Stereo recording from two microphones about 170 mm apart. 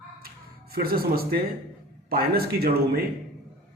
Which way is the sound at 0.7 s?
60° right (ahead or behind).